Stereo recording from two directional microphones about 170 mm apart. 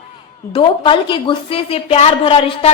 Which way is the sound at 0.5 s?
30° left (ahead or behind).